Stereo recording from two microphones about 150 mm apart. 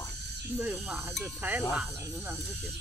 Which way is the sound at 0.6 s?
15° right (ahead or behind).